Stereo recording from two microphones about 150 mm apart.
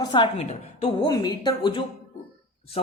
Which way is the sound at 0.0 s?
30° left (ahead or behind).